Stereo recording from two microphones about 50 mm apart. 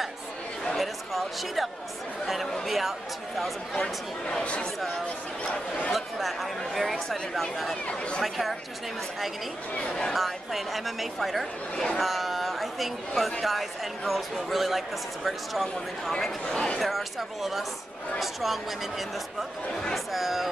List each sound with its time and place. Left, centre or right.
0.7 s a sound: centre
2.2 s speech: centre
3.7 s speech: centre
5.9 s speech: centre
7.9 s speech: left
8.2 s speech: centre
10.1 s speech: centre
11.7 s speech: centre
12.0 s speech: centre
16.8 s speech: centre
19.7 s speech: centre
20.1 s speech: centre